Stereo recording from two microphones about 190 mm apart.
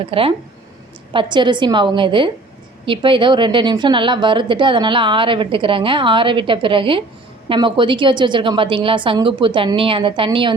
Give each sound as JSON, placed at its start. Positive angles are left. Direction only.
{"t": 0.0, "sound": "a woman's voice", "side_deg": -30}